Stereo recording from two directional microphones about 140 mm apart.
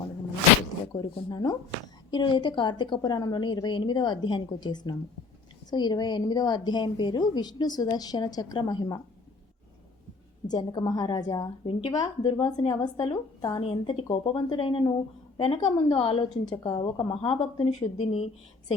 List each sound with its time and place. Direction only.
0.9 s a woman's voice: 30° left (ahead or behind)
10.5 s a woman's voice: 30° left (ahead or behind); by 18.3 s 45° left (ahead or behind)